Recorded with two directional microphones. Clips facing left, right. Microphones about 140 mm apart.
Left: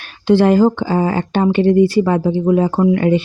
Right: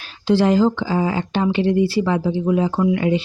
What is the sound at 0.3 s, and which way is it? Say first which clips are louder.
Speech: left 4 dB; 55° left (ahead or behind).